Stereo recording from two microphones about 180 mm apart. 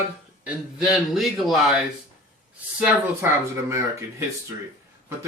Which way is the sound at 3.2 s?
15° right (ahead or behind).